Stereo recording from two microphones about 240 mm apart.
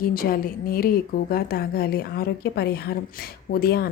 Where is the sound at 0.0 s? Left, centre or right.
Left.